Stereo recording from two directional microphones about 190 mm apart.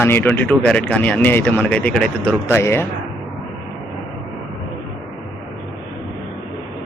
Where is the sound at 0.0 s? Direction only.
10° left (ahead or behind).